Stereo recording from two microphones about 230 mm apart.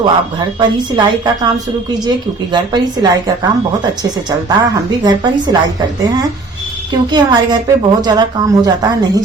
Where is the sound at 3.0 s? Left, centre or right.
Centre.